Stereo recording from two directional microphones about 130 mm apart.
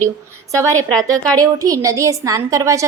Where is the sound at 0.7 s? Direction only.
5° left (ahead or behind).